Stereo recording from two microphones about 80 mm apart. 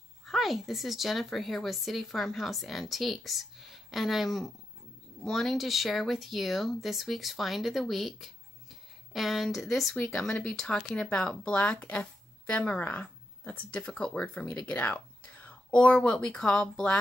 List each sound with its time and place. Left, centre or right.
0.3 s speech: centre